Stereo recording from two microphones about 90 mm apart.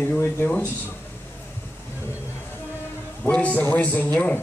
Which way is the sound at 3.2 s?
15° left (ahead or behind).